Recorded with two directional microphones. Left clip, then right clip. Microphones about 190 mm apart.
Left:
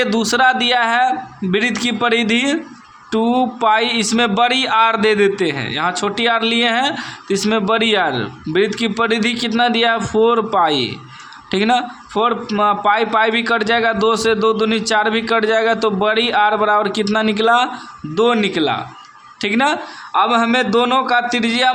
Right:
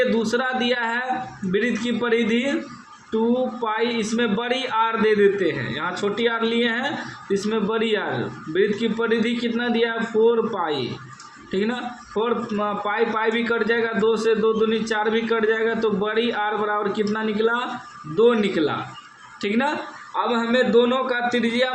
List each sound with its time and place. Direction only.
0.0 s a man's voice: 50° left (ahead or behind)